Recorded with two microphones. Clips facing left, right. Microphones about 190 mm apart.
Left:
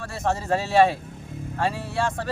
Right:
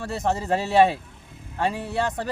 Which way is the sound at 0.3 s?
20° right (ahead or behind).